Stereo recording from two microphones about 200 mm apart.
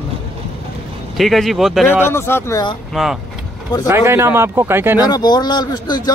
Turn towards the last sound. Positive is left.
turn(degrees=20)  # may be behind; listen again after turning